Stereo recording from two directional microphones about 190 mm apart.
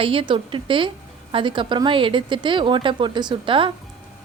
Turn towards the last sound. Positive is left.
turn(degrees=-25)  # may be behind; listen again after turning